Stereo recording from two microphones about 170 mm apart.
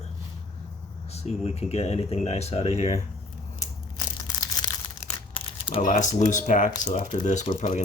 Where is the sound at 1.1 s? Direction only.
40° left (ahead or behind).